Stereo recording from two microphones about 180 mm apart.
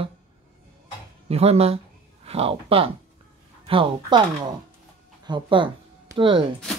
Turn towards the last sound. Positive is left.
turn(degrees=-25)  # may be behind; listen again after turning